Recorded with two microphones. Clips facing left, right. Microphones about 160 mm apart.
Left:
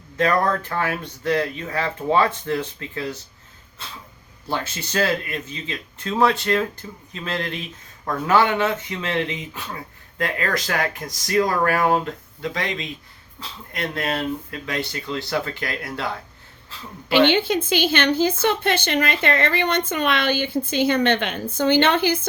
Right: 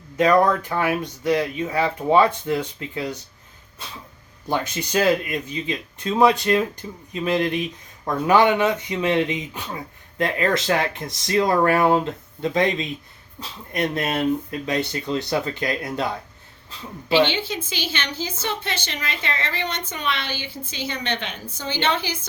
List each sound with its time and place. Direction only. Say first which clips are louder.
0.2 s speech: right 3 dB; 15° right (ahead or behind)
4.4 s speech: right 3 dB; 15° right (ahead or behind)
17.2 s a woman's voice: left 8 dB; 55° left (ahead or behind)